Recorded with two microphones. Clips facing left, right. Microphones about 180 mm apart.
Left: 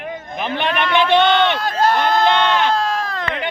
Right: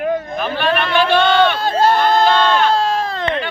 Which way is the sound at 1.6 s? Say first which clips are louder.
Right 3 dB; 30° right (ahead or behind).